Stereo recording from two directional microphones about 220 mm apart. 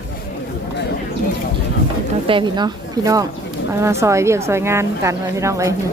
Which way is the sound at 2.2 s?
20° right (ahead or behind).